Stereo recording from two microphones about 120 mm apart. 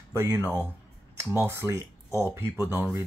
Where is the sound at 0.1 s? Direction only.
20° right (ahead or behind).